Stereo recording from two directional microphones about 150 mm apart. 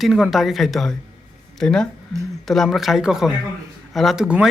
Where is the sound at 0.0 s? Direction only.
Centre (ahead or behind).